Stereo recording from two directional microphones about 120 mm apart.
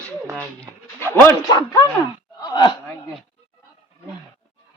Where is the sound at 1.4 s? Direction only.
30° left (ahead or behind).